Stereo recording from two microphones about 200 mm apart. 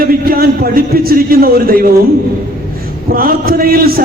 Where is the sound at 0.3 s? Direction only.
45° right (ahead or behind).